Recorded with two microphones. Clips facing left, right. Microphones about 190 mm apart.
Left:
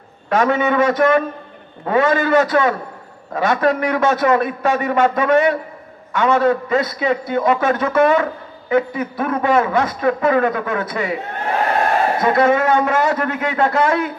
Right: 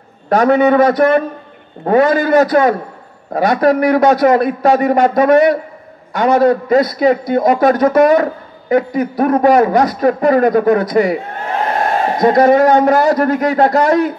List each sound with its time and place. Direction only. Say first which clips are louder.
0.3 s a man's voice: right 6 dB; 35° right (ahead or behind)
12.2 s a man's voice: right 8 dB; 40° right (ahead or behind)